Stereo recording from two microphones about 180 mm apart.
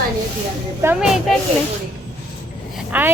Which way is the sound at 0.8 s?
5° right (ahead or behind).